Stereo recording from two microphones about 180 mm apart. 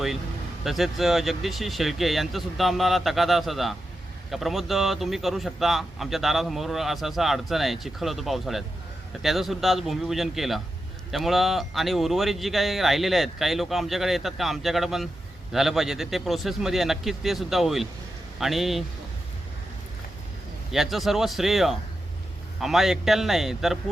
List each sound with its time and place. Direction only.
0.6 s speech: centre (ahead or behind)
20.7 s speech: centre (ahead or behind)